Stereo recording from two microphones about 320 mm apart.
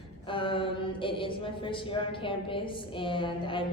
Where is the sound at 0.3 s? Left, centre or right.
Centre.